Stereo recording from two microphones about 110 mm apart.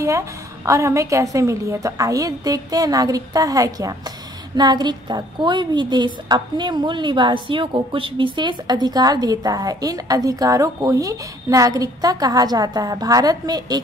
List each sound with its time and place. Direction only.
0.0 s a woman's voice: 25° right (ahead or behind)